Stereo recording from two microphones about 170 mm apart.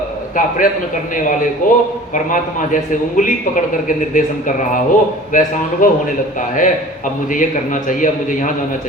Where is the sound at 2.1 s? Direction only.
50° left (ahead or behind).